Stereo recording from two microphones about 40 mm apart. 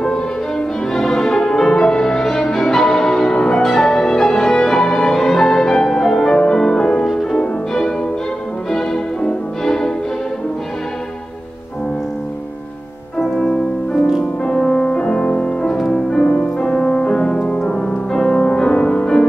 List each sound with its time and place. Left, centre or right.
0.0 s music: centre
14.4 s music: left